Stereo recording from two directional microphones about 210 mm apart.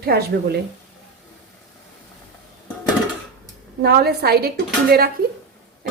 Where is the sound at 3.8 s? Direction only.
50° right (ahead or behind).